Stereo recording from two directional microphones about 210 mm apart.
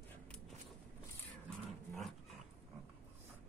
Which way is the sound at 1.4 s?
Centre (ahead or behind).